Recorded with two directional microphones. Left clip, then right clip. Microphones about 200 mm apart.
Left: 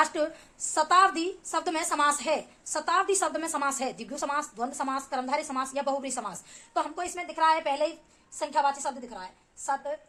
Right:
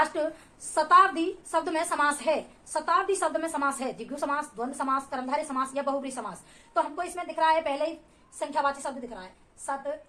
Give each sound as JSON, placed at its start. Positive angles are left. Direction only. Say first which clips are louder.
{"t": 0.1, "sound": "a woman's voice", "louder": "even", "side_deg": 50}